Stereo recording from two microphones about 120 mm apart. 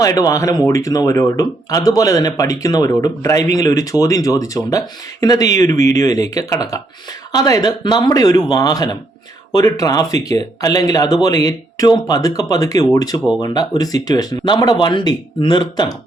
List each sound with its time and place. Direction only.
0.0 s speech: 30° left (ahead or behind)